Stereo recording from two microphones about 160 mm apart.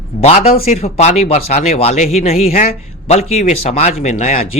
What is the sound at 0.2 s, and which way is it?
Speech, 40° left (ahead or behind).